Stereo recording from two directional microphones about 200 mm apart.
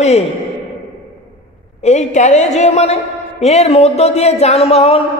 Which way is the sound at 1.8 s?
35° left (ahead or behind).